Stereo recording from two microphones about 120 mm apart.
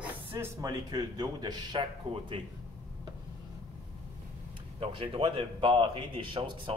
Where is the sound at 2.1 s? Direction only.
55° right (ahead or behind).